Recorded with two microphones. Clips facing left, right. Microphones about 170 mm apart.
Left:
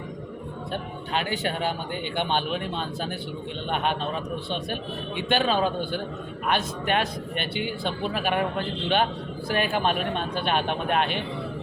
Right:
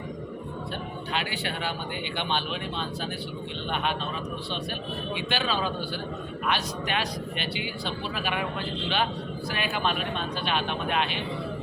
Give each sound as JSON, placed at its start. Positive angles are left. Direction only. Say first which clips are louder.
{"t": 1.1, "sound": "a man's voice", "louder": "left 5 dB", "side_deg": 45}
{"t": 5.3, "sound": "a man's voice", "louder": "left 7 dB", "side_deg": 50}